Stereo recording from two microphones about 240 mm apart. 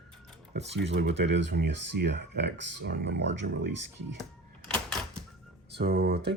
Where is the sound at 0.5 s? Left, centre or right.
Right.